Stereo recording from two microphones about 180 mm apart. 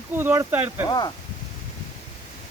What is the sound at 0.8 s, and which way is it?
Speech, 25° left (ahead or behind).